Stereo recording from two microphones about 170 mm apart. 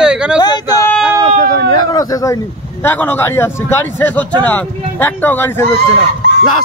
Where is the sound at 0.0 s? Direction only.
5° right (ahead or behind).